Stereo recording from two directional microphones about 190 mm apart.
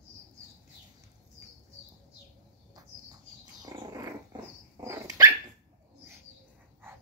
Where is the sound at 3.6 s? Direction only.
20° right (ahead or behind).